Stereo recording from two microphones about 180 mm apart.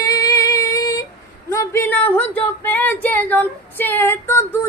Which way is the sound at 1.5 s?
15° left (ahead or behind).